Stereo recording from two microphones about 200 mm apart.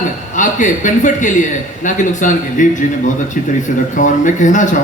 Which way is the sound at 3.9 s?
40° left (ahead or behind).